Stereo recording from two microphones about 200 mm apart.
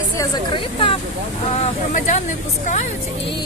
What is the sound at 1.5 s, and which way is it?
Speech, 35° left (ahead or behind).